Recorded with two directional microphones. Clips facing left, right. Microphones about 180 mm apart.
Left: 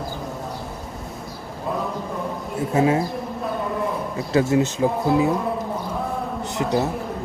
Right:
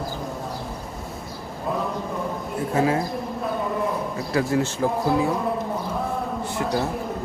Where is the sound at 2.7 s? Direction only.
20° left (ahead or behind).